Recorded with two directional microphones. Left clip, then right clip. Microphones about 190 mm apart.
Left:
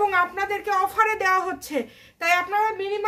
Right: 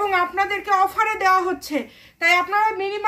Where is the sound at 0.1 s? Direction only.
60° left (ahead or behind).